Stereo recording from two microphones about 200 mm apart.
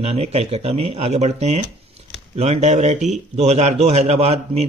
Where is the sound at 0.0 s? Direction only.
30° right (ahead or behind).